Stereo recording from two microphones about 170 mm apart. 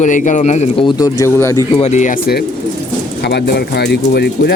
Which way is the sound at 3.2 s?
75° left (ahead or behind).